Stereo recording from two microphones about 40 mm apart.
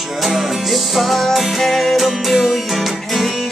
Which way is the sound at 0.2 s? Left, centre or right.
Centre.